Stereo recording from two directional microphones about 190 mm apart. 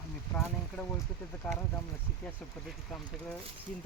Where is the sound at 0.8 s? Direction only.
10° left (ahead or behind).